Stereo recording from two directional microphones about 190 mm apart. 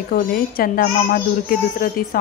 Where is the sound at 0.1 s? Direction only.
50° left (ahead or behind).